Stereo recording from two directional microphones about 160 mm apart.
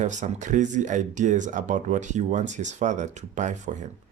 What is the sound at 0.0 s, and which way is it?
Speech, 50° right (ahead or behind).